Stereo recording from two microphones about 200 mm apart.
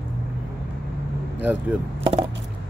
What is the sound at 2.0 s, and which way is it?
Chop, 25° right (ahead or behind).